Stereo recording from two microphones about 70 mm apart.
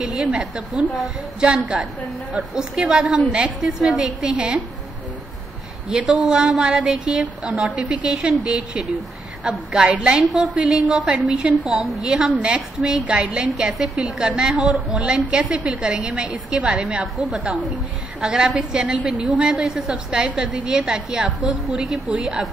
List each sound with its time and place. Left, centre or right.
0.0 s a woman's voice: centre
5.9 s a woman's voice: centre
11.7 s a woman's voice: centre
17.0 s a woman's voice: centre
17.4 s a woman's voice: centre